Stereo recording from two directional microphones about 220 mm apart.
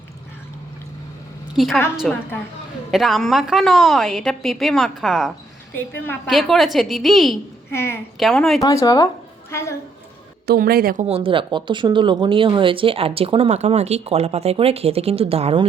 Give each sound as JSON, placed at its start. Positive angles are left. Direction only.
{"t": 1.5, "sound": "a woman's voice", "side_deg": 0}
{"t": 7.7, "sound": "a woman's voice", "side_deg": 10}
{"t": 8.6, "sound": "speech", "side_deg": 15}
{"t": 10.4, "sound": "a woman's voice", "side_deg": -45}
{"t": 11.0, "sound": "speech", "side_deg": -25}